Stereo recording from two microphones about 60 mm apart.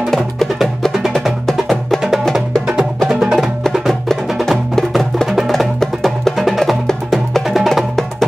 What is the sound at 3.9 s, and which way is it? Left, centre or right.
Music, centre.